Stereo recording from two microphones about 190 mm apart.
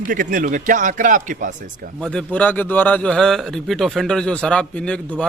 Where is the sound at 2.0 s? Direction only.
5° left (ahead or behind).